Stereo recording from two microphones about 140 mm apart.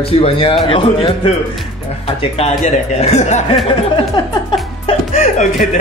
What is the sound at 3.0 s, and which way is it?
Speech, 55° left (ahead or behind).